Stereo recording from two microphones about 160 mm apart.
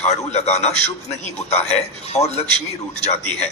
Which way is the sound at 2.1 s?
40° left (ahead or behind).